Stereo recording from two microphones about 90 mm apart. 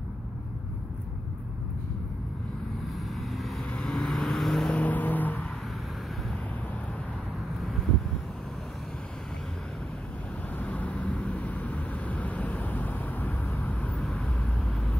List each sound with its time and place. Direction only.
3.2 s vehicle: centre (ahead or behind)
3.7 s vehicle: 10° left (ahead or behind)
10.6 s vehicle: 15° left (ahead or behind)